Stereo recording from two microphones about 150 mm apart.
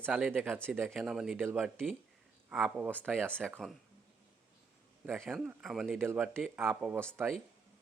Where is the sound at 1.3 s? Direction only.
15° right (ahead or behind).